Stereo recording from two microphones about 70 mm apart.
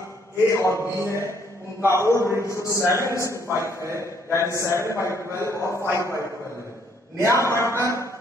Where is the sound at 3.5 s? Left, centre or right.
Right.